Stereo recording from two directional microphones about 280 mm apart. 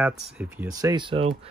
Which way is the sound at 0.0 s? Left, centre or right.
Centre.